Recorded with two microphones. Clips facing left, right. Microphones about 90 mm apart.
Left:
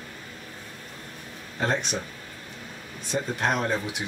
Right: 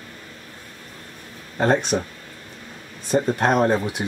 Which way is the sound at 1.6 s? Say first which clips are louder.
Right 8 dB; 45° right (ahead or behind).